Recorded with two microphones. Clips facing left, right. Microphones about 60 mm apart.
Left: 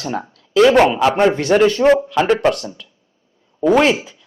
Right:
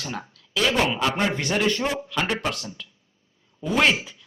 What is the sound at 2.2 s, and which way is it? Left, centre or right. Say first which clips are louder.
Speech: left 11 dB; left.